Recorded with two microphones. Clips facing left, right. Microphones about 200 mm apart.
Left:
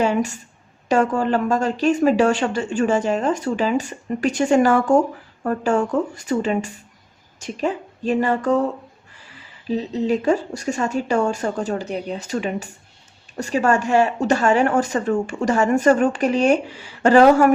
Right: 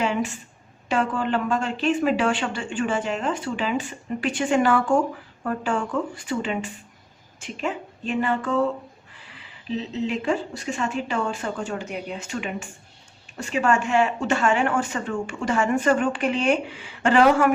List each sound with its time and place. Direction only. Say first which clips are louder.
0.0 s a woman's voice: left 5 dB; 40° left (ahead or behind)